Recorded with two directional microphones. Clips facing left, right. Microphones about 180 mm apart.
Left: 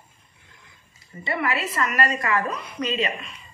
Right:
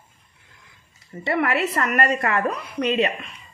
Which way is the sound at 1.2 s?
65° right (ahead or behind).